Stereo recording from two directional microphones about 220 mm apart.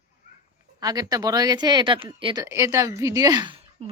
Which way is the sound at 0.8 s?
15° right (ahead or behind).